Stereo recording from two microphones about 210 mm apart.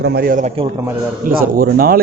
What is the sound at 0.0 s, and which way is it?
Speech, 50° right (ahead or behind).